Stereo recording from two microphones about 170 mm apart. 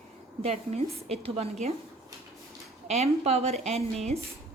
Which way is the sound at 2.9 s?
40° right (ahead or behind).